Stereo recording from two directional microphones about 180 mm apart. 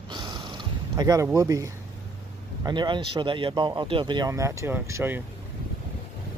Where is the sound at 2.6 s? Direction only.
25° right (ahead or behind).